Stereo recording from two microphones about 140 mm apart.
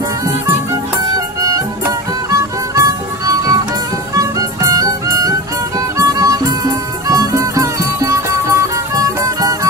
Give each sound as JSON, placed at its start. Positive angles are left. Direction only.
{"t": 1.4, "sound": "music", "side_deg": -25}